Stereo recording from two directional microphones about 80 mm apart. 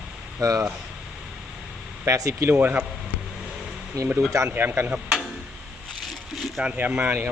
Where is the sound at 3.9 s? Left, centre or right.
Right.